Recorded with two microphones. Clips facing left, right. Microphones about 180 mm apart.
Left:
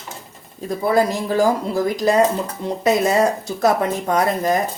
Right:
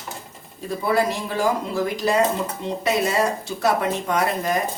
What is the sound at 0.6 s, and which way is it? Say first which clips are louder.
Speech: left 4 dB; 40° left (ahead or behind).